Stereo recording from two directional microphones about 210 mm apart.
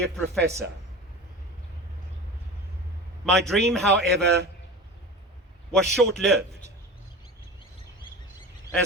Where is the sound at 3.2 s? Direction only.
Centre (ahead or behind).